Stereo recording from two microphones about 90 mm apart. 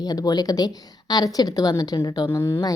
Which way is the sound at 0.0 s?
45° left (ahead or behind).